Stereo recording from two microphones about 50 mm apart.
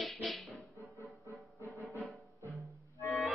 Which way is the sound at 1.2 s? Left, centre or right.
Right.